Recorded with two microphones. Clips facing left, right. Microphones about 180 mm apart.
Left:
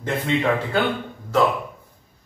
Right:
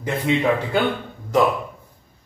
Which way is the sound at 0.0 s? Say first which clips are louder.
Right 2 dB; 10° right (ahead or behind).